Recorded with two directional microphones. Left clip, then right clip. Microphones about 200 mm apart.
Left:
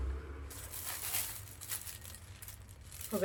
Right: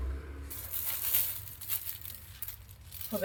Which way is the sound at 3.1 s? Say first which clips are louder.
Right 2 dB; 40° left (ahead or behind).